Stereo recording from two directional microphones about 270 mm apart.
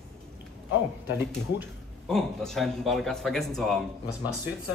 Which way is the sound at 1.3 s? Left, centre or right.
Centre.